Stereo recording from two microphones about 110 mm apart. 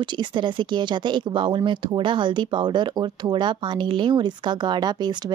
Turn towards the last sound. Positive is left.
turn(degrees=-40)  # may be behind; listen again after turning